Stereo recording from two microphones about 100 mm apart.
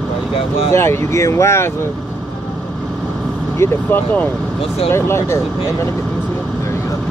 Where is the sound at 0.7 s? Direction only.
25° left (ahead or behind).